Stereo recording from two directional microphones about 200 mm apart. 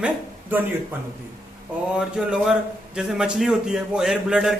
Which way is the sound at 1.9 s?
5° right (ahead or behind).